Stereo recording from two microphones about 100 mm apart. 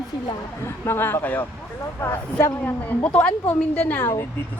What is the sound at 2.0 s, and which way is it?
Speech, 30° left (ahead or behind).